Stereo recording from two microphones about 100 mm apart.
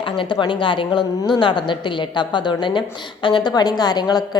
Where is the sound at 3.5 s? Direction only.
40° left (ahead or behind).